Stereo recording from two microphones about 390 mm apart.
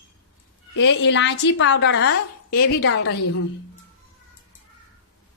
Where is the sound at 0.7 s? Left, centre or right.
Left.